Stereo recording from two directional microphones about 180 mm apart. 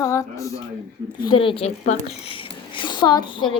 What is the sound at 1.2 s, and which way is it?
A woman's voice, 30° left (ahead or behind).